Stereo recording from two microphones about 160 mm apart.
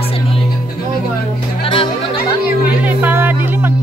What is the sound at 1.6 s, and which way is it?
Music, 35° left (ahead or behind).